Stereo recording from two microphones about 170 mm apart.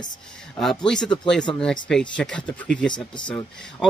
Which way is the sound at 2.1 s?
5° left (ahead or behind).